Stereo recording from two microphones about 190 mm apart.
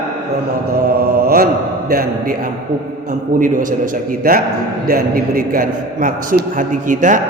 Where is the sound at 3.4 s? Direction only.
45° right (ahead or behind).